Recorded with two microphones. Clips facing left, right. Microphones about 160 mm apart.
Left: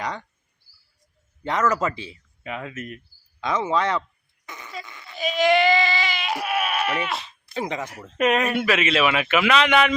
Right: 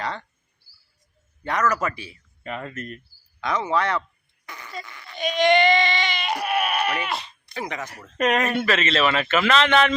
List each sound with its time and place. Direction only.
0.0 s speech: 15° left (ahead or behind)
1.5 s speech: 25° left (ahead or behind)
2.4 s speech: 5° left (ahead or behind)
3.4 s speech: 20° left (ahead or behind)
4.4 s dog: 20° left (ahead or behind)
5.1 s sheep: 5° left (ahead or behind)
7.5 s speech: 25° left (ahead or behind)
8.2 s speech: 5° left (ahead or behind)